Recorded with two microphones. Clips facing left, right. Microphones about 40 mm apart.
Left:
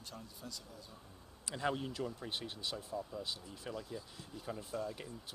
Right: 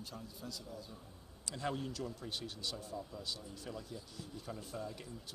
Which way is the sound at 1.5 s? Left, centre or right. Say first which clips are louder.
Left 2 dB; centre.